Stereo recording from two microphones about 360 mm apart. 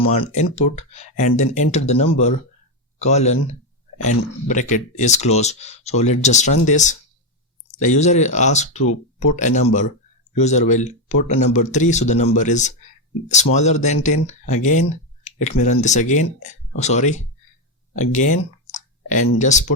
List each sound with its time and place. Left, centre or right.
0.0 s speech: centre
17.9 s a sound: centre
19.4 s speech: centre